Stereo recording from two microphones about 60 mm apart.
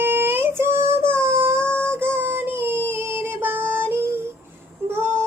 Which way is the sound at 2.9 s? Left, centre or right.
Right.